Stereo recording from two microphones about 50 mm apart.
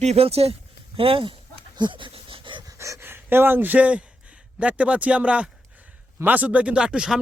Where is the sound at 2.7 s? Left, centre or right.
Right.